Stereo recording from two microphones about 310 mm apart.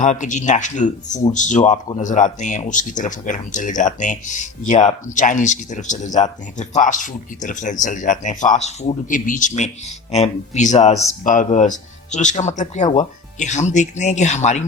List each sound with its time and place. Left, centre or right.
0.0 s speech: left